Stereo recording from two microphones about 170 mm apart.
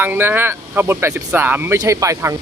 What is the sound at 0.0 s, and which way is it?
Speech, 10° right (ahead or behind).